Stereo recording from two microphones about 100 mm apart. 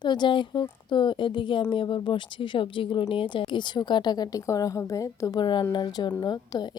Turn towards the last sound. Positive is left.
turn(degrees=45)  # may be behind; listen again after turning